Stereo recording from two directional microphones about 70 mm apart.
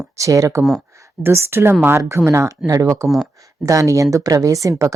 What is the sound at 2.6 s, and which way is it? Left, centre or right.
A woman's voice, right.